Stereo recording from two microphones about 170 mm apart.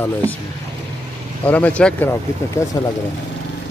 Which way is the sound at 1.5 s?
10° left (ahead or behind).